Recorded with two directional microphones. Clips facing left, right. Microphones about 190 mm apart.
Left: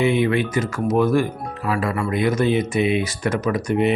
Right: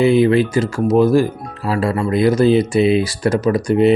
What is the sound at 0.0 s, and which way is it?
Speech, 35° right (ahead or behind).